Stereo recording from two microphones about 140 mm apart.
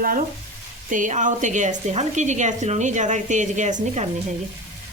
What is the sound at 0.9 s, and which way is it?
A woman's voice, 65° right (ahead or behind).